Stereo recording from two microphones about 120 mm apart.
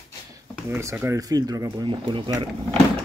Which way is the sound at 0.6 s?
20° right (ahead or behind).